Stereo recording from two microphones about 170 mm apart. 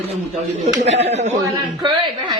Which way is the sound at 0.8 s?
40° right (ahead or behind).